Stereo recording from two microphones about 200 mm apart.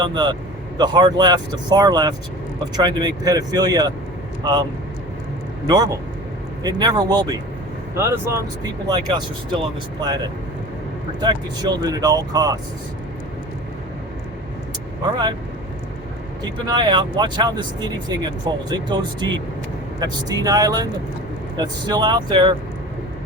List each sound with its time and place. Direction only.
0.0 s speech: 20° right (ahead or behind)
5.6 s speech: 20° right (ahead or behind)
11.2 s speech: 20° right (ahead or behind)
16.4 s speech: 20° right (ahead or behind)